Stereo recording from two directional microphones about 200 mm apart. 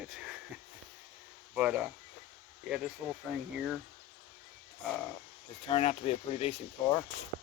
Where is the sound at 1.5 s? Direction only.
5° right (ahead or behind).